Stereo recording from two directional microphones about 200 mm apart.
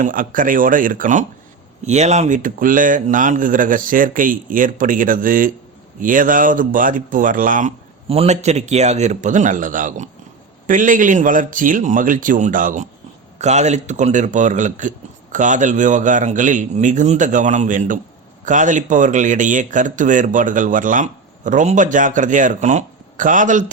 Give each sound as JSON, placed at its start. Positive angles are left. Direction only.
{"t": 0.0, "sound": "speech", "side_deg": -45}
{"t": 8.0, "sound": "speech", "side_deg": -30}